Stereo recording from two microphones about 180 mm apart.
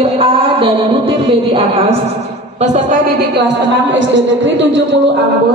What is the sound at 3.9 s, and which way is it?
Speech, 90° right.